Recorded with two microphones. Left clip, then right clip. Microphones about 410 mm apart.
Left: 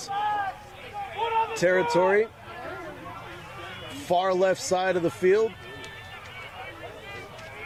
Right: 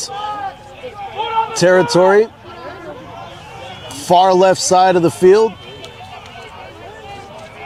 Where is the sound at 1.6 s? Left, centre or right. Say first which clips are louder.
Right 12 dB; right.